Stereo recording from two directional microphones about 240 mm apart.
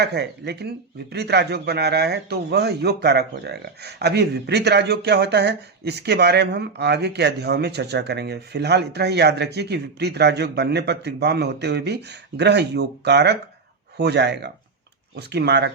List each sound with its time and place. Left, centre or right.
0.0 s a man's voice: right